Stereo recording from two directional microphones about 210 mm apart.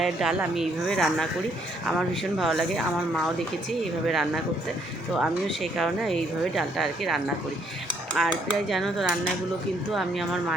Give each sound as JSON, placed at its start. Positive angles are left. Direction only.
{"t": 0.0, "sound": "speech", "side_deg": 0}
{"t": 5.7, "sound": "speech", "side_deg": 0}